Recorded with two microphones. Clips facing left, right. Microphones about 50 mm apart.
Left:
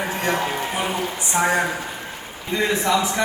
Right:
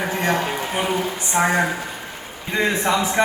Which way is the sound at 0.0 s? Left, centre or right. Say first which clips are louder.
Right 2 dB; right.